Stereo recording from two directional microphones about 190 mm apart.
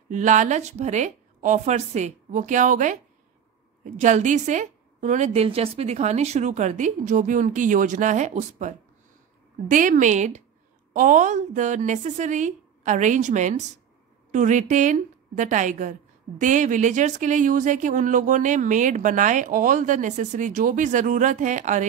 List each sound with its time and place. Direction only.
0.1 s a woman's voice: 40° right (ahead or behind)